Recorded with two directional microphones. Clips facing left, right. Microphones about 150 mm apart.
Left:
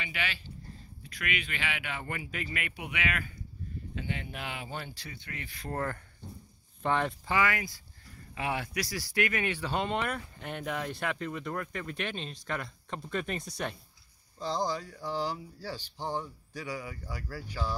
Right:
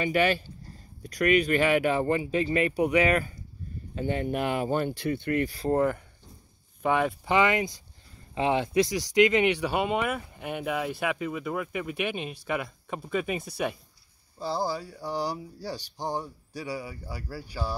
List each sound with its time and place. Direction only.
0.0 s speech: 45° right (ahead or behind)
5.5 s speech: 30° right (ahead or behind)
5.8 s speech: 15° right (ahead or behind)
7.3 s speech: 20° right (ahead or behind)